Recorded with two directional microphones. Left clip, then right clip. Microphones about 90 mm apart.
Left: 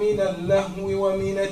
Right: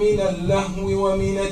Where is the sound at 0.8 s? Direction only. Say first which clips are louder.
Right 2 dB; 15° left (ahead or behind).